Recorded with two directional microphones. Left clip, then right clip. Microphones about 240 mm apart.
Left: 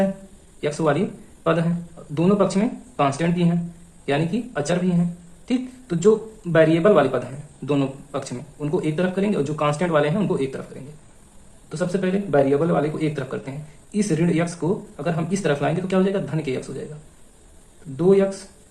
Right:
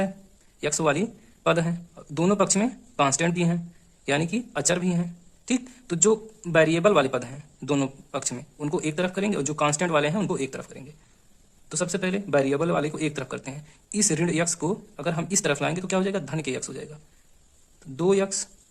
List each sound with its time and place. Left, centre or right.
0.6 s speech: right
11.7 s speech: right
17.9 s speech: right